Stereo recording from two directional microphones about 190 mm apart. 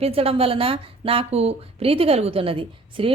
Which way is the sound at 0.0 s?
30° right (ahead or behind).